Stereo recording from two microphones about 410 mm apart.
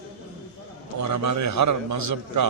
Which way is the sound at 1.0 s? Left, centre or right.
Right.